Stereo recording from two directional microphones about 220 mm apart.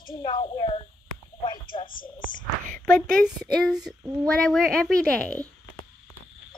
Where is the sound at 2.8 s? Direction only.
5° left (ahead or behind).